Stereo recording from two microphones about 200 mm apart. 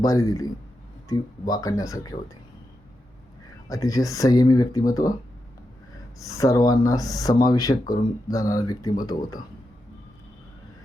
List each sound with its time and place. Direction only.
0.0 s speech: 15° left (ahead or behind)
3.7 s speech: 15° left (ahead or behind)
6.1 s speech: 15° left (ahead or behind)